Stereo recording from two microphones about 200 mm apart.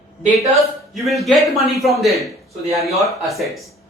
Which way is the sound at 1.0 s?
Centre (ahead or behind).